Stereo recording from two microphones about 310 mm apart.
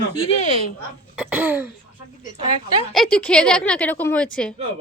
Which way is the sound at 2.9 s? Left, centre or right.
Centre.